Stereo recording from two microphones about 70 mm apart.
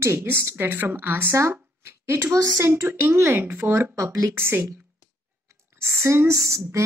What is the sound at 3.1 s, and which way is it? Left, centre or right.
Speech, right.